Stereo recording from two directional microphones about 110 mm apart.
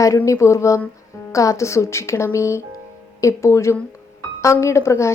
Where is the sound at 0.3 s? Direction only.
25° left (ahead or behind).